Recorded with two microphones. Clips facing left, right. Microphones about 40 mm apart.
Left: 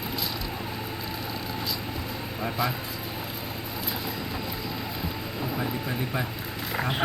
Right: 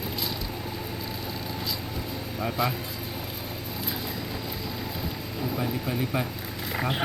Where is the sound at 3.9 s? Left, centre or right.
Centre.